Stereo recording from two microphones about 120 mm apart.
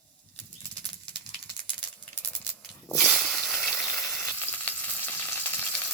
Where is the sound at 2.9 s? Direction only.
Centre (ahead or behind).